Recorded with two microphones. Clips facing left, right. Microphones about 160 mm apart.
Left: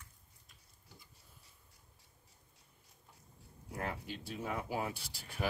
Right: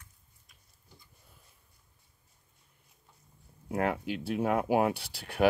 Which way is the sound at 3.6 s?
75° right (ahead or behind).